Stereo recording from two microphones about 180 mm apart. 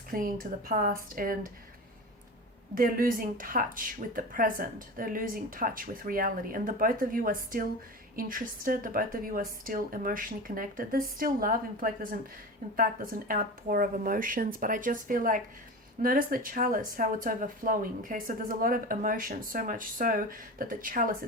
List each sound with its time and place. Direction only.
0.1 s speech: 55° right (ahead or behind)
2.7 s speech: 55° right (ahead or behind)